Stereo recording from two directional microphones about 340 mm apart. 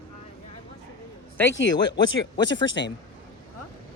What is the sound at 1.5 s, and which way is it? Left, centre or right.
Speech, left.